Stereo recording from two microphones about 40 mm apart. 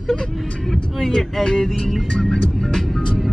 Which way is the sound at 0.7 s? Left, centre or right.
Centre.